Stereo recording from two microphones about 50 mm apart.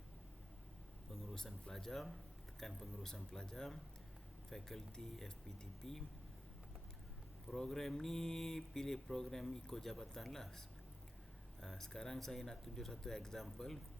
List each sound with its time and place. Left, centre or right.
1.1 s speech: centre
7.4 s speech: centre
11.6 s speech: centre